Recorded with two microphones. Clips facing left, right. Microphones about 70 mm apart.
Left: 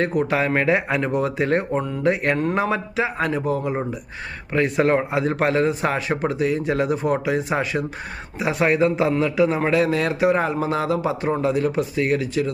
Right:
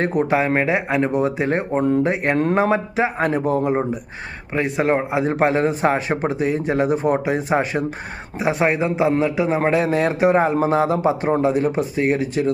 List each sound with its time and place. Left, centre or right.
0.2 s a man's voice: right
4.5 s a man's voice: centre